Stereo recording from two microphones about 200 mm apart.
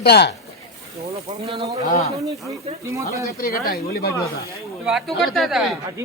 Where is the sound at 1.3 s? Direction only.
30° right (ahead or behind).